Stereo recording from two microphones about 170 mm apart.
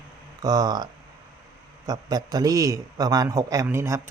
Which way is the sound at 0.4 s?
25° right (ahead or behind).